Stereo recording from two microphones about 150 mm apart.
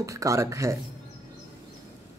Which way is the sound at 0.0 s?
20° right (ahead or behind).